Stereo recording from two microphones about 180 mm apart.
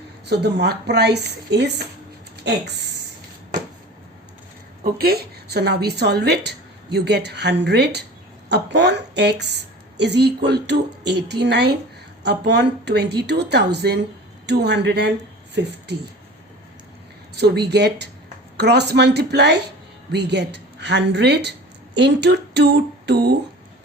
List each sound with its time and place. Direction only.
0.3 s a woman's voice: 65° right (ahead or behind)
4.8 s a woman's voice: 55° right (ahead or behind)
17.3 s a woman's voice: 65° right (ahead or behind)